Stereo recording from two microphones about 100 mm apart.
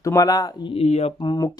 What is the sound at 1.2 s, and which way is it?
Speech, 40° left (ahead or behind).